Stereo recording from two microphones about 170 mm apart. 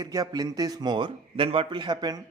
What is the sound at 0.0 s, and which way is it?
A man's voice, 20° right (ahead or behind).